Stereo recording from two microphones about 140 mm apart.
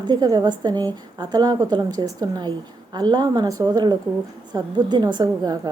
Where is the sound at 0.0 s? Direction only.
30° right (ahead or behind).